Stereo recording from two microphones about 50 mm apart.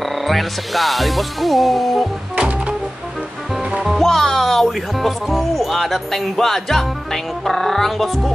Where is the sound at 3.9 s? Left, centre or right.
Centre.